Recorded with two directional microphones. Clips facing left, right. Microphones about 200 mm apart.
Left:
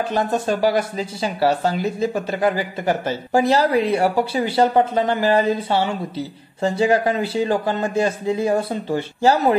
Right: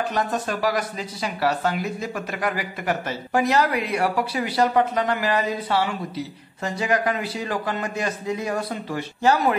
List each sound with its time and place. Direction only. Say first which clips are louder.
0.1 s speech: left 5 dB; 30° left (ahead or behind)